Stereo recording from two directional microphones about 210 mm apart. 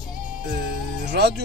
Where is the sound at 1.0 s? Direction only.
50° right (ahead or behind).